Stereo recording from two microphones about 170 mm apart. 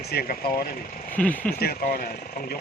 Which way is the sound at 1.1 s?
10° left (ahead or behind).